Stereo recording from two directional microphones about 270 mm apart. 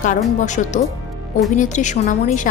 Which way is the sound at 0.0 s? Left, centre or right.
Left.